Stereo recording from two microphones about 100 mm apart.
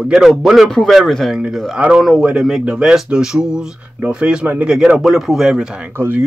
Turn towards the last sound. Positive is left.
turn(degrees=-20)  # may be behind; listen again after turning